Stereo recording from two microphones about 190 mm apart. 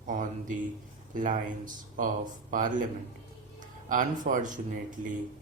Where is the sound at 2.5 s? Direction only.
45° right (ahead or behind).